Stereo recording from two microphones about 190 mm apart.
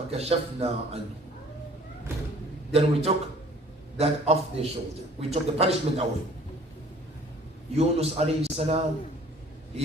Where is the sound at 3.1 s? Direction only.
30° right (ahead or behind).